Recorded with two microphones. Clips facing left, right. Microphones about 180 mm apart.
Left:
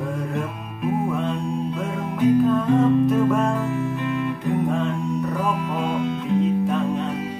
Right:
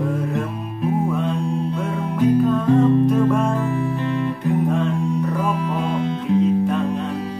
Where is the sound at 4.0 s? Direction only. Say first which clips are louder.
Right 2 dB; 35° right (ahead or behind).